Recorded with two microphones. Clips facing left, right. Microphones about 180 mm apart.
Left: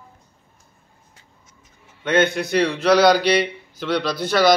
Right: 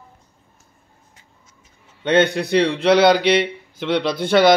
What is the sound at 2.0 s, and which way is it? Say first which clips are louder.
A man's voice: right 2 dB; 35° right (ahead or behind).